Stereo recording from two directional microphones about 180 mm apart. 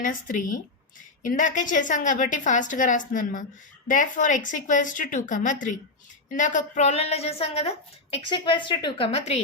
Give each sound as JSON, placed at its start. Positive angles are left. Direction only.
{"t": 0.0, "sound": "a woman's voice", "side_deg": 45}